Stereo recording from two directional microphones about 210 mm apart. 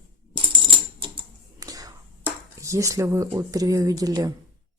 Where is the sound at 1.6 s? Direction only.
15° right (ahead or behind).